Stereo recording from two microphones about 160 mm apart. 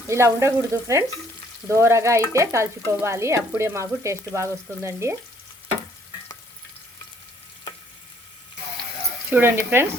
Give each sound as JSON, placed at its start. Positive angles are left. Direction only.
{"t": 0.1, "sound": "frying", "side_deg": -15}
{"t": 9.3, "sound": "frying", "side_deg": -15}